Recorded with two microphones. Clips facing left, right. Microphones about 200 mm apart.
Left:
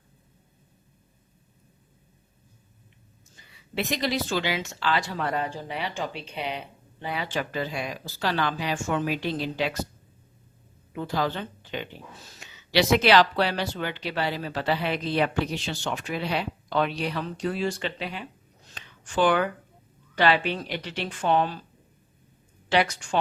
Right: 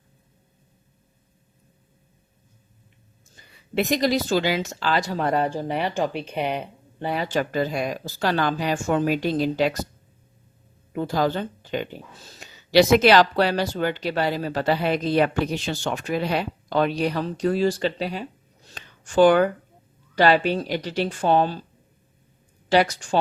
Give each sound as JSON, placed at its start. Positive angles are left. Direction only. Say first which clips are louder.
{"t": 3.3, "sound": "speech", "louder": "right 6 dB", "side_deg": -45}
{"t": 10.9, "sound": "speech", "louder": "right 5 dB", "side_deg": -45}
{"t": 18.7, "sound": "a sound", "louder": "right 6 dB", "side_deg": -40}
{"t": 20.1, "sound": "speech", "louder": "right 5 dB", "side_deg": -40}
{"t": 22.7, "sound": "speech", "louder": "right 4 dB", "side_deg": -40}